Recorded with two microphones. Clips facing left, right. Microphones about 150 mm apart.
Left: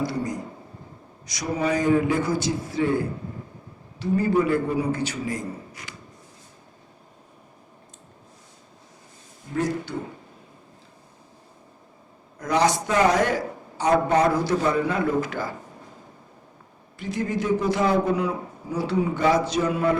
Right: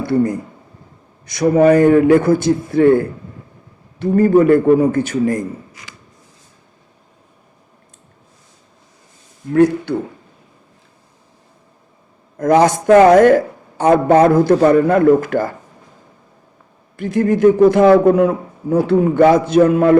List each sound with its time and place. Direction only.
0.0 s a man's voice: 55° right (ahead or behind)
5.8 s a sound: 90° right
9.5 s a man's voice: 60° right (ahead or behind)
12.4 s a man's voice: 50° right (ahead or behind)
17.0 s a man's voice: 50° right (ahead or behind)